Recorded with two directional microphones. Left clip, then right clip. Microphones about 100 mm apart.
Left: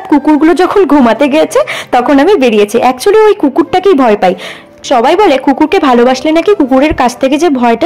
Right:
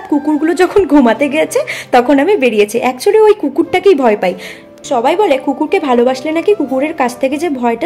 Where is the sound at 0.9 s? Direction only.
40° left (ahead or behind).